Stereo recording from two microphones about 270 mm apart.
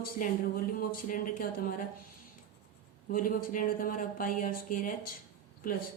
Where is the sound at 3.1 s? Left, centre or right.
Left.